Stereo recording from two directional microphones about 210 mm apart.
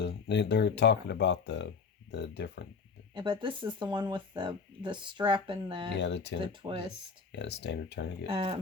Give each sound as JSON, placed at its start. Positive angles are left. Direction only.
{"t": 0.0, "sound": "speech", "side_deg": 55}
{"t": 3.2, "sound": "speech", "side_deg": -25}
{"t": 5.9, "sound": "speech", "side_deg": 55}
{"t": 6.4, "sound": "speech", "side_deg": -25}
{"t": 7.3, "sound": "speech", "side_deg": 55}
{"t": 8.3, "sound": "speech", "side_deg": -30}